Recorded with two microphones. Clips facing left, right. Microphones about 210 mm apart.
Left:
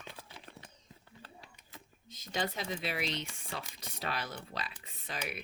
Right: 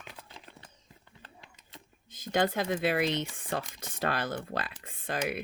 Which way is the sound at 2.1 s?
55° right (ahead or behind).